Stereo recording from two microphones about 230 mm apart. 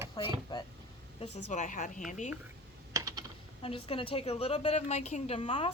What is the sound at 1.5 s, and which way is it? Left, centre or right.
Speech, left.